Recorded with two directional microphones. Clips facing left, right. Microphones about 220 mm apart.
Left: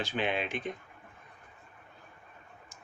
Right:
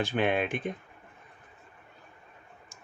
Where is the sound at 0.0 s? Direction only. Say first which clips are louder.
Right 5 dB; 55° right (ahead or behind).